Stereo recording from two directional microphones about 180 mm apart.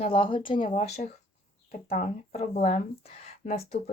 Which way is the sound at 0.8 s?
40° left (ahead or behind).